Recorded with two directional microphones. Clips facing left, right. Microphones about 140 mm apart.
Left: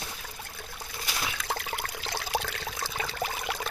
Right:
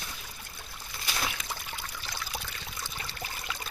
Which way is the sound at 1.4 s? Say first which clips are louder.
Left 7 dB; 90° left.